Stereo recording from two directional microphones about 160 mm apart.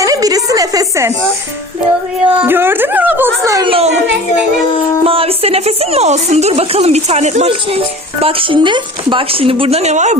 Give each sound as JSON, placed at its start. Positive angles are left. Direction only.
{"t": 0.0, "sound": "a sound", "side_deg": -20}
{"t": 2.4, "sound": "a woman's voice", "side_deg": -15}
{"t": 3.7, "sound": "a woman's voice", "side_deg": -40}
{"t": 5.0, "sound": "a woman's voice", "side_deg": -35}